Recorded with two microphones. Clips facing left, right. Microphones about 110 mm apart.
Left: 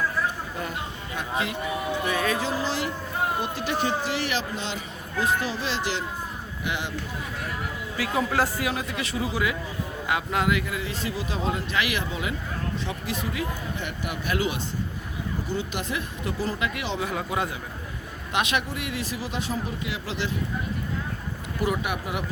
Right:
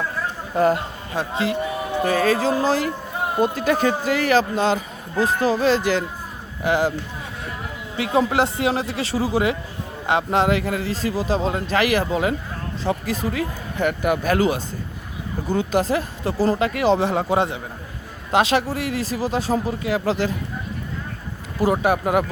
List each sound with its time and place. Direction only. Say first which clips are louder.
0.5 s speech: right 15 dB; 80° right
1.1 s a man's voice: right 6 dB; 30° right (ahead or behind)
7.9 s speech: right 6 dB; 25° right (ahead or behind)
13.8 s a man's voice: right 15 dB; 50° right (ahead or behind)
21.6 s speech: right 8 dB; 35° right (ahead or behind)